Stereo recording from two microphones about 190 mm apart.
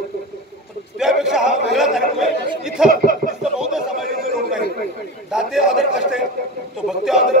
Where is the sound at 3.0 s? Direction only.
50° right (ahead or behind).